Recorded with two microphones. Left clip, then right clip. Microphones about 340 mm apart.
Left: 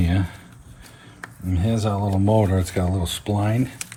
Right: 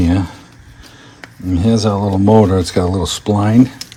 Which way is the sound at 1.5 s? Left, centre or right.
Right.